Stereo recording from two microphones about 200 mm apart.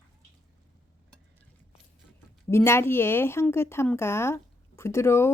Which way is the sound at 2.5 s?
15° left (ahead or behind).